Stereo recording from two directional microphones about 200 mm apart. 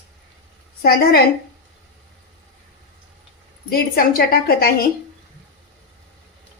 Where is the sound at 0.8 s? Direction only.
50° left (ahead or behind).